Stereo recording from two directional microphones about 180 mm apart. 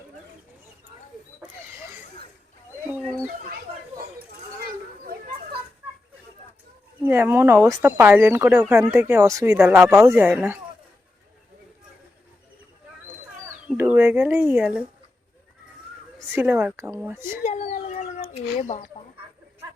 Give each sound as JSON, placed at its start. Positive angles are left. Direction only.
{"t": 1.4, "sound": "rodents", "side_deg": -15}
{"t": 7.0, "sound": "speech", "side_deg": -10}
{"t": 13.7, "sound": "speech", "side_deg": -15}
{"t": 16.1, "sound": "speech", "side_deg": -15}
{"t": 17.4, "sound": "a sound", "side_deg": 40}